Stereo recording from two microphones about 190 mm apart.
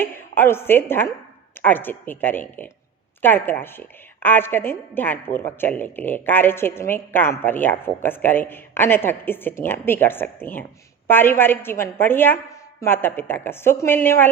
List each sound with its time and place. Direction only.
0.0 s a woman's voice: 10° left (ahead or behind)